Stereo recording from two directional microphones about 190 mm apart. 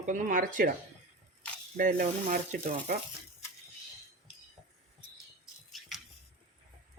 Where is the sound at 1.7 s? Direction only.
45° right (ahead or behind).